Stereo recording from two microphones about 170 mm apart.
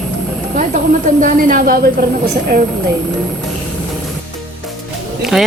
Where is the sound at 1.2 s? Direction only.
50° right (ahead or behind).